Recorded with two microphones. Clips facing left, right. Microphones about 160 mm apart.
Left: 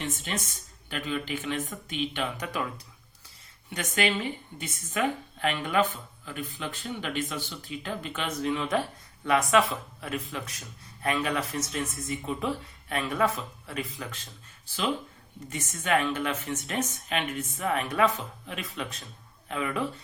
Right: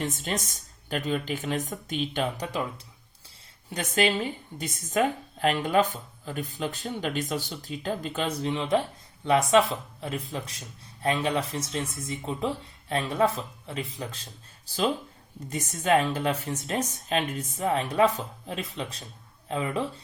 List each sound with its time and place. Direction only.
0.0 s a woman's voice: 40° right (ahead or behind)
15.4 s a woman's voice: 35° right (ahead or behind)